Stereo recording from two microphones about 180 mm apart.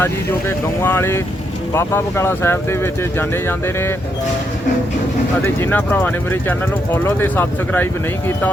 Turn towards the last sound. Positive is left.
turn(degrees=10)  # may be behind; listen again after turning